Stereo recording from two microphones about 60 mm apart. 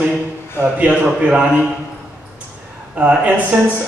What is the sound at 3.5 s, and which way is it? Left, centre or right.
Speech, right.